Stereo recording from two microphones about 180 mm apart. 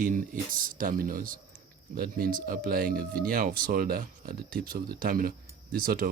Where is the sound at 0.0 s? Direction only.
50° right (ahead or behind).